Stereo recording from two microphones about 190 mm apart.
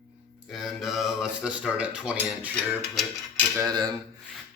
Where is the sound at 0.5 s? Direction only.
Centre (ahead or behind).